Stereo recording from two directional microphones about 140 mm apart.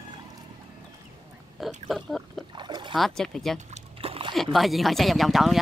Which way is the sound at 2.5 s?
35° right (ahead or behind).